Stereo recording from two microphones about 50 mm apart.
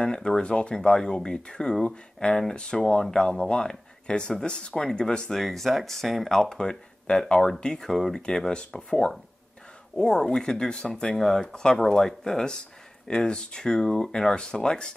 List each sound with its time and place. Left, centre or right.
0.0 s speech: centre
5.3 s speech: centre